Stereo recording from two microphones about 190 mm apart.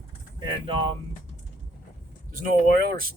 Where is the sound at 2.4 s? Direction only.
50° right (ahead or behind).